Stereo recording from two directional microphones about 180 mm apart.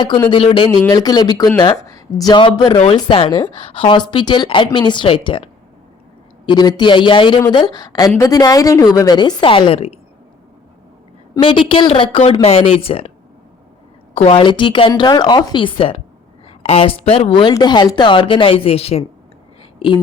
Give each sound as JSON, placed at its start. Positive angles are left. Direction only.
{"t": 0.2, "sound": "speech", "side_deg": 25}
{"t": 11.3, "sound": "speech", "side_deg": 30}
{"t": 14.1, "sound": "speech", "side_deg": 35}